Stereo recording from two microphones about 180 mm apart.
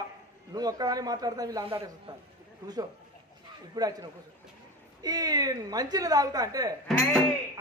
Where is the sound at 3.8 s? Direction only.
20° right (ahead or behind).